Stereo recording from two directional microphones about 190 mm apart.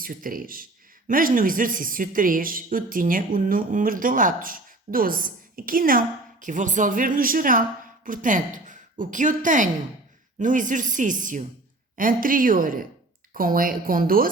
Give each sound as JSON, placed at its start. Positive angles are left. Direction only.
{"t": 0.0, "sound": "a woman's voice", "side_deg": -50}